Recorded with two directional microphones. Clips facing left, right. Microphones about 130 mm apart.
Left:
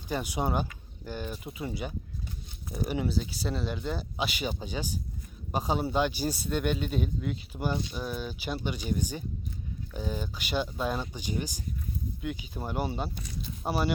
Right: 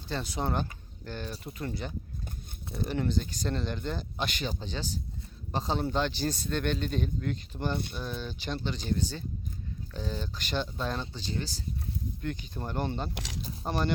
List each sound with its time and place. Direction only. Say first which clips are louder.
0.1 s a man's voice: left 2 dB; 10° left (ahead or behind)
13.1 s speech: right 1 dB; 90° right
13.7 s a man's voice: left 2 dB; 10° left (ahead or behind)